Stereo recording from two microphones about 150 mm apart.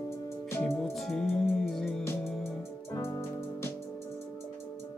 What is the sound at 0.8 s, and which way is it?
Music, centre (ahead or behind).